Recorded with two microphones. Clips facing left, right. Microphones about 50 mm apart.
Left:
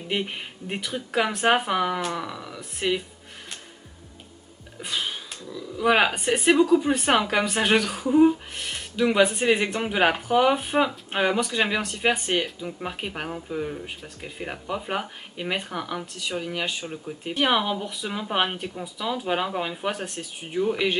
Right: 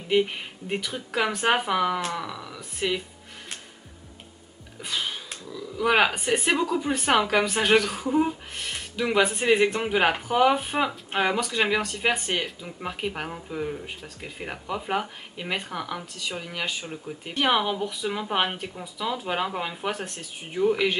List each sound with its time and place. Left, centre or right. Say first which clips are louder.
0.1 s speech: right 6 dB; centre
4.8 s sniff: left 1 dB; centre
5.8 s speech: left 1 dB; centre